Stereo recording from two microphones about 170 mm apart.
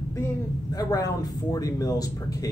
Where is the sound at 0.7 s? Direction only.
20° left (ahead or behind).